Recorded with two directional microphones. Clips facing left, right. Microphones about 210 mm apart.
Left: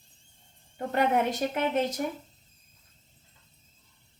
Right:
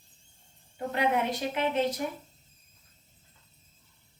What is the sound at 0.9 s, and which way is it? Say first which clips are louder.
Speech: left 2 dB; 45° left (ahead or behind).